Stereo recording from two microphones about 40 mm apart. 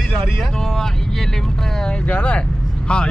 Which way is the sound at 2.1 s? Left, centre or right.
Left.